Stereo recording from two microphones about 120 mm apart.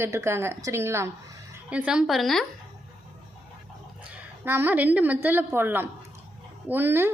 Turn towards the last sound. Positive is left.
turn(degrees=-20)  # may be behind; listen again after turning